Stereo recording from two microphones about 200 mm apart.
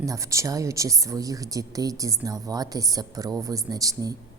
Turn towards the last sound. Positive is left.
turn(degrees=-20)  # may be behind; listen again after turning